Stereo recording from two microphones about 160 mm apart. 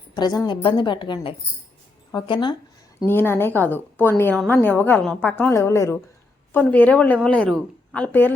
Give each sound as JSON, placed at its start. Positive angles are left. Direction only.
{"t": 0.1, "sound": "a woman's voice", "side_deg": 25}
{"t": 3.1, "sound": "a woman's voice", "side_deg": 15}